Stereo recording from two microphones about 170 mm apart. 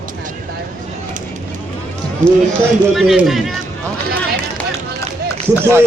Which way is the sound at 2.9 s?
Centre (ahead or behind).